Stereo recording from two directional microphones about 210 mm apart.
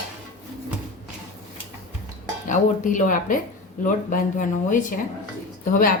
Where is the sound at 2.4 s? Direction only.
35° left (ahead or behind).